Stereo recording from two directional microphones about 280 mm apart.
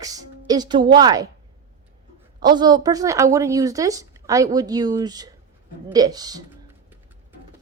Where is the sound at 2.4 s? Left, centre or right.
Centre.